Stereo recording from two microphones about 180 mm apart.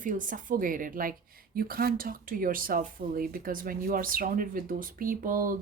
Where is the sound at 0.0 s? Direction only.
45° right (ahead or behind).